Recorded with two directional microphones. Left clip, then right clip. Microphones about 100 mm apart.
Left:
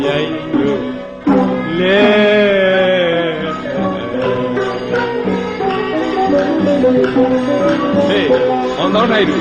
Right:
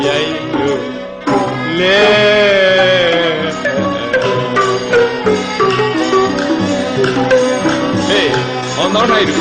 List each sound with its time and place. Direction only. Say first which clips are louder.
1.8 s music: right 2 dB; 40° right (ahead or behind)
7.7 s music: even; 35° right (ahead or behind)